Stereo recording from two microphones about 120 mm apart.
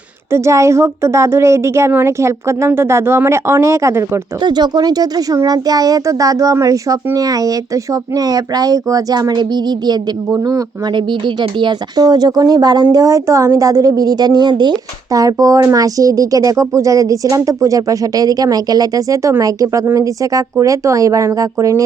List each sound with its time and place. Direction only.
0.3 s speech: 25° right (ahead or behind)
4.4 s speech: 35° right (ahead or behind)